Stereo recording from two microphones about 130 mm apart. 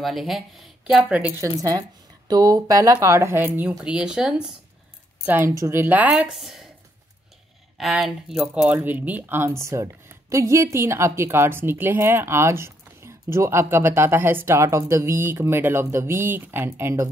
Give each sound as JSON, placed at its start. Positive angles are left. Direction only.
{"t": 0.0, "sound": "speech", "side_deg": 0}
{"t": 1.4, "sound": "speech", "side_deg": -25}
{"t": 7.7, "sound": "speech", "side_deg": 0}